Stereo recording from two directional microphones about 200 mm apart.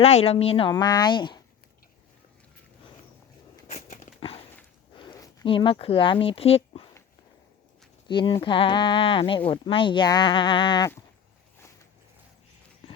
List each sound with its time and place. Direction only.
0.0 s speech: 30° left (ahead or behind)
3.7 s a sound: 35° left (ahead or behind)
5.1 s speech: 20° left (ahead or behind)
8.0 s speech: 25° left (ahead or behind)